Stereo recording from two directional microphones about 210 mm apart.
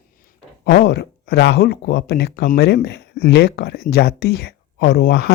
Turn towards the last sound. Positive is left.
turn(degrees=55)  # may be behind; listen again after turning